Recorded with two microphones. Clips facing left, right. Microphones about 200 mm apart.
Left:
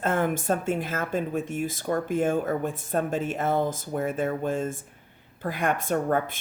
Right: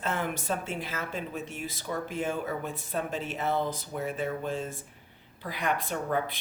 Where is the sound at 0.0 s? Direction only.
50° left (ahead or behind).